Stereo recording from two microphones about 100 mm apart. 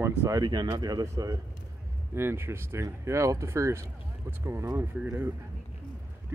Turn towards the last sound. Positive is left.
turn(degrees=-20)  # may be behind; listen again after turning